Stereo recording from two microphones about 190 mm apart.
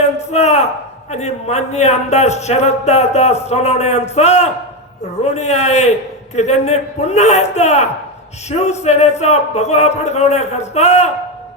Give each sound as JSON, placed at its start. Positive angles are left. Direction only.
{"t": 0.0, "sound": "a man's voice", "side_deg": 35}